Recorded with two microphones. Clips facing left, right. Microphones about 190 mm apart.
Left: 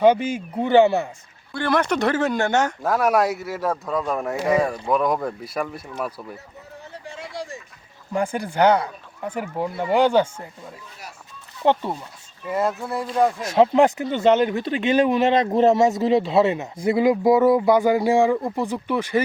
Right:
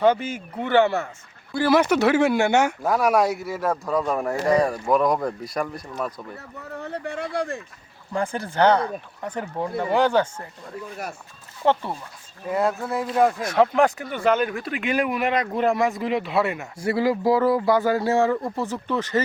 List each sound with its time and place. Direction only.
0.0 s speech: 15° left (ahead or behind)
1.5 s speech: 5° right (ahead or behind)
6.3 s speech: 60° right (ahead or behind)
8.1 s speech: 10° left (ahead or behind)
11.6 s speech: 15° left (ahead or behind)
12.5 s speech: centre (ahead or behind)
13.5 s speech: 25° left (ahead or behind)